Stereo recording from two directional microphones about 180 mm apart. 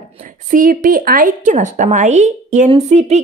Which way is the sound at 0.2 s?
50° right (ahead or behind).